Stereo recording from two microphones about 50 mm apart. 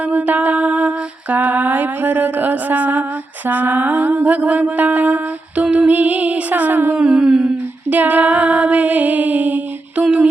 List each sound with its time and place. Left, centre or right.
0.0 s lullaby: right
5.7 s female singing: right
6.9 s a sound: centre
7.9 s female singing: right